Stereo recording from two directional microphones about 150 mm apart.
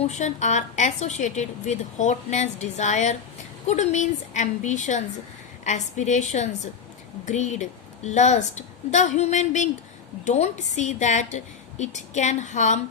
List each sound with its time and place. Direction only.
0.0 s a woman's voice: 50° left (ahead or behind)